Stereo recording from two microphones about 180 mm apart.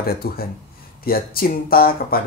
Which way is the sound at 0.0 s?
60° left (ahead or behind).